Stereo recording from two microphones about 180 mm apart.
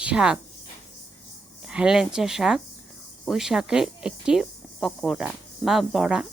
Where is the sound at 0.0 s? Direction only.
5° right (ahead or behind).